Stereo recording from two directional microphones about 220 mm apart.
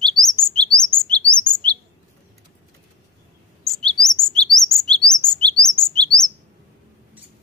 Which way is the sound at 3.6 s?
Centre (ahead or behind).